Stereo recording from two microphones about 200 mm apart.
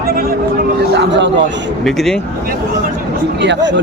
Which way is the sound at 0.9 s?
60° right (ahead or behind).